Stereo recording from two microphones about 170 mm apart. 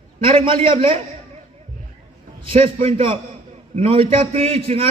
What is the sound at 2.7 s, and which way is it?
A man's voice, 35° right (ahead or behind).